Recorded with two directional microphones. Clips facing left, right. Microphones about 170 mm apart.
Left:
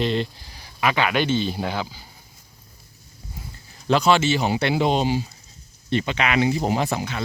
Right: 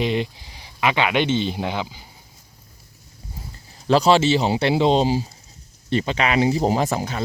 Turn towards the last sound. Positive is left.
turn(degrees=-40)  # may be behind; listen again after turning